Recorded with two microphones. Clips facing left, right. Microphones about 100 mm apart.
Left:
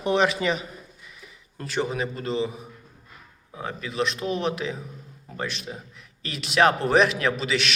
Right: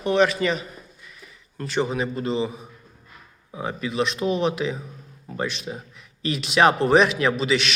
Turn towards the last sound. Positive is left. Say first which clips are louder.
# right 3 dB
turn(degrees=0)  # may be behind; listen again after turning